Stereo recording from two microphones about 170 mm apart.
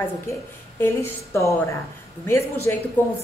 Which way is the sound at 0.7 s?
15° left (ahead or behind).